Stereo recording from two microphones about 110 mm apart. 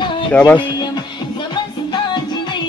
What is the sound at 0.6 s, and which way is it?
Music, 45° left (ahead or behind).